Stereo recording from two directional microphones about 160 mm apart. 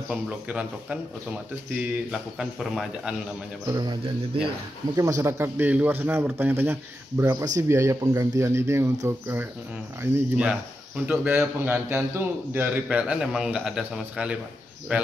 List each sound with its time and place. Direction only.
0.1 s a man's voice: 5° right (ahead or behind)
3.6 s speech: 25° right (ahead or behind)
4.9 s a man's voice: 20° right (ahead or behind)